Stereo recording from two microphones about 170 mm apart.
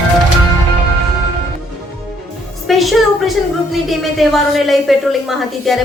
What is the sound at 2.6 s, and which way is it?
A woman's voice, centre (ahead or behind).